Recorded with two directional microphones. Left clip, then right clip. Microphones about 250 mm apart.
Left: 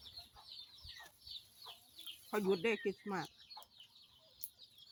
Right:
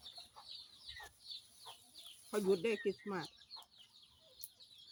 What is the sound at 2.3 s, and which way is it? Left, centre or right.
Speech, centre.